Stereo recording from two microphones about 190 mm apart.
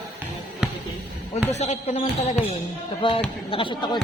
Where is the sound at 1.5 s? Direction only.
35° left (ahead or behind).